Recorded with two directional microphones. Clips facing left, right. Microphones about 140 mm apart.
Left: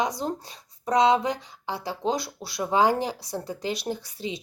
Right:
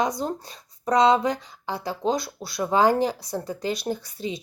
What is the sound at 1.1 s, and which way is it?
A woman's voice, 20° left (ahead or behind).